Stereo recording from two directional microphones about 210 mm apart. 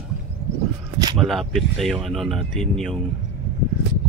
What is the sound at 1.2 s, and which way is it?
Speech, centre (ahead or behind).